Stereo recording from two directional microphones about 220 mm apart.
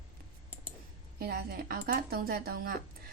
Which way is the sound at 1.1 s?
45° right (ahead or behind).